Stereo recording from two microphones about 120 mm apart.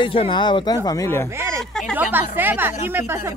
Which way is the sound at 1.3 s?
20° right (ahead or behind).